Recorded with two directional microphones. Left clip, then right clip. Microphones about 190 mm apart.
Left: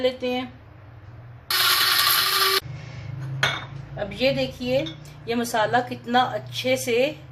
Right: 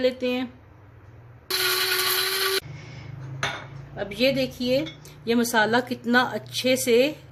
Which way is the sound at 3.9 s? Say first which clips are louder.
Even; 55° right (ahead or behind).